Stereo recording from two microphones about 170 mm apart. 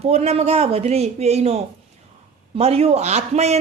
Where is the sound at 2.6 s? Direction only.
35° right (ahead or behind).